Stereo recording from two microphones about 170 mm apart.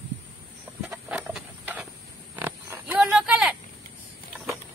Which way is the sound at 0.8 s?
10° right (ahead or behind).